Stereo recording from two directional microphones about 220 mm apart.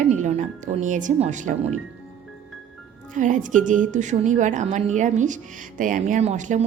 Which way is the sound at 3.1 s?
35° right (ahead or behind).